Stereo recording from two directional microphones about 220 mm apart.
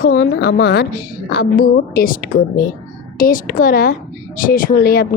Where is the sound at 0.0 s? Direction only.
45° left (ahead or behind).